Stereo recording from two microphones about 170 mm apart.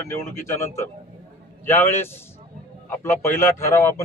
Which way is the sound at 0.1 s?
15° left (ahead or behind).